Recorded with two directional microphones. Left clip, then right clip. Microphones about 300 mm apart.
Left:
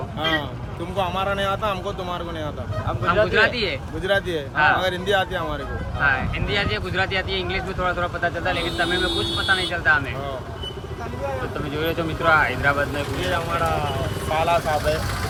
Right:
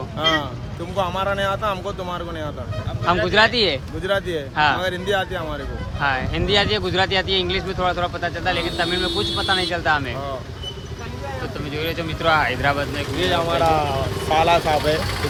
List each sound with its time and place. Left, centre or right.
0.2 s vehicle: centre
0.9 s speech: centre
3.2 s speech: centre
11.7 s speech: centre
13.3 s speech: right